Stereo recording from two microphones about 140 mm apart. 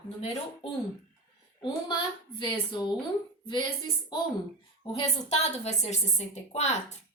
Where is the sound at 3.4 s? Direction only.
35° left (ahead or behind).